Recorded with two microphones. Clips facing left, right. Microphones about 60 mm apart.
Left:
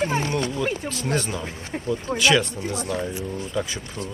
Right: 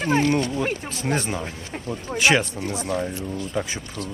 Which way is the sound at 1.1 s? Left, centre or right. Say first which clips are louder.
Even; right.